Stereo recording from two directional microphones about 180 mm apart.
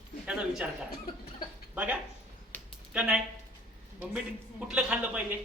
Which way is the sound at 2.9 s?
5° right (ahead or behind).